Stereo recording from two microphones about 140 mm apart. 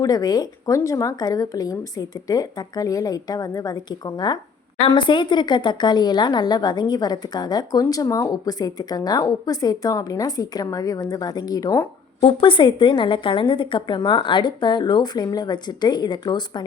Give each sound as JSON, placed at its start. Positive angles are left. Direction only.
{"t": 0.0, "sound": "speech", "side_deg": 25}
{"t": 12.2, "sound": "a woman's voice", "side_deg": 40}